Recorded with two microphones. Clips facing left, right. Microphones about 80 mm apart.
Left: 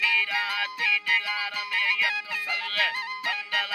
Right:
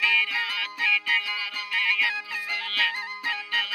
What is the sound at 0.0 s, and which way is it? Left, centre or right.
Music, left.